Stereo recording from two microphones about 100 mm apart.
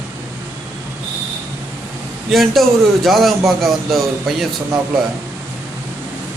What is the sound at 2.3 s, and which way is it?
A man's voice, centre (ahead or behind).